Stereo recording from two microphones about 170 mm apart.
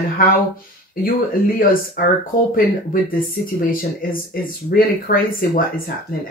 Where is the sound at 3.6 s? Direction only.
55° left (ahead or behind).